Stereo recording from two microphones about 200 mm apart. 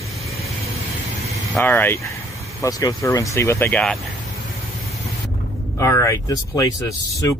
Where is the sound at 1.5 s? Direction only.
10° left (ahead or behind).